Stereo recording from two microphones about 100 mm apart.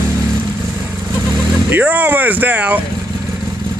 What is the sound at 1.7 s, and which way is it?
Speech, 15° right (ahead or behind).